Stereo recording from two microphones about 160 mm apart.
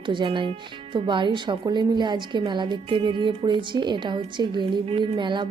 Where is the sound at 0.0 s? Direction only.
30° right (ahead or behind).